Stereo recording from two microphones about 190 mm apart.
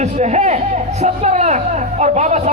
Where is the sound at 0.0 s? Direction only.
35° right (ahead or behind).